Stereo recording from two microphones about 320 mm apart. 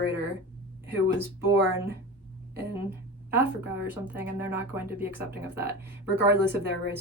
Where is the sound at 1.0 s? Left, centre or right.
Centre.